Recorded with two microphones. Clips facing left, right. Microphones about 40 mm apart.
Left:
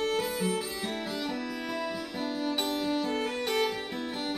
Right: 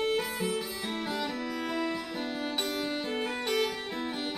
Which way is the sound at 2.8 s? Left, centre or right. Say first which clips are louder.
Left 4 dB; centre.